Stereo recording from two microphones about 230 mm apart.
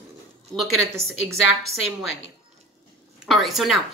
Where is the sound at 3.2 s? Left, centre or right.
Centre.